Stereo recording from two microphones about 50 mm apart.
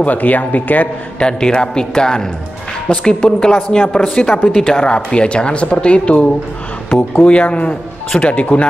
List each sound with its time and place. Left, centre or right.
0.0 s speech: left
1.2 s speech: centre
6.9 s speech: left